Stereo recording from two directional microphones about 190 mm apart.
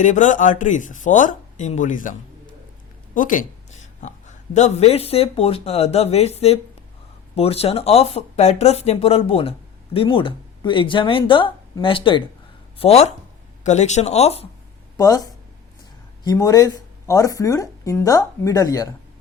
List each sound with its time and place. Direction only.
0.0 s speech: 40° left (ahead or behind)
3.2 s speech: 45° left (ahead or behind)
14.9 s speech: 20° left (ahead or behind)